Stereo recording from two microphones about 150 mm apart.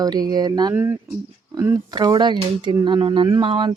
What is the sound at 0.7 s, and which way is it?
Speech, 15° right (ahead or behind).